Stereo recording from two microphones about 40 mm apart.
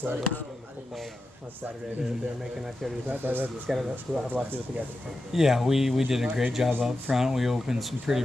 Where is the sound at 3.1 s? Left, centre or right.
Right.